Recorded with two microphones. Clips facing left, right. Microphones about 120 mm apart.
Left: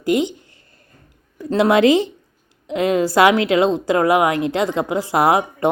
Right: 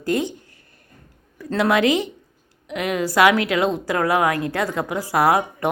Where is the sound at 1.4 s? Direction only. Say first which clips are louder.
Left 4 dB; 20° left (ahead or behind).